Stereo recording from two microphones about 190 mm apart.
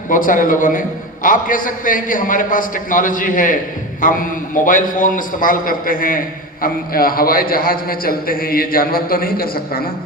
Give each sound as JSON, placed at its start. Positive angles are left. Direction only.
{"t": 0.1, "sound": "a man's voice", "side_deg": 45}